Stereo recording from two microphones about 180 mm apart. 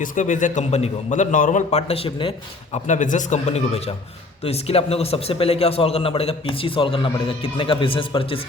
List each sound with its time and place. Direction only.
0.0 s a man's voice: 45° left (ahead or behind); by 2.3 s 30° left (ahead or behind)
2.7 s a man's voice: 40° left (ahead or behind)